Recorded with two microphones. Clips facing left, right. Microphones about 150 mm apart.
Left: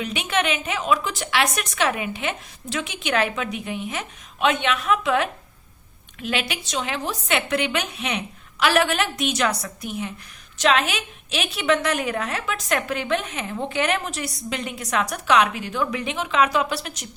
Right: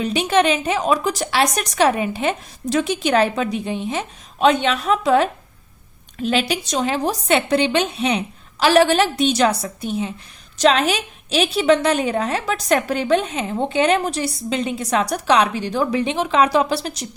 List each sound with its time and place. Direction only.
0.0 s a woman's voice: 35° right (ahead or behind)